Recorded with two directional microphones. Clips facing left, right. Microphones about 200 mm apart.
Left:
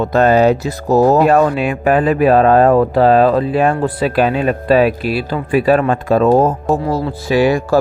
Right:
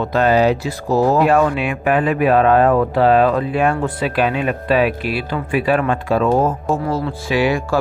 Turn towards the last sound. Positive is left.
turn(degrees=40)  # may be behind; listen again after turning